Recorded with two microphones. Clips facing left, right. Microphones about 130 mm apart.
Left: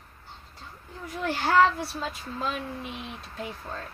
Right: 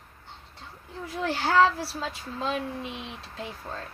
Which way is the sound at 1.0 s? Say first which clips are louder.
Even; 30° right (ahead or behind).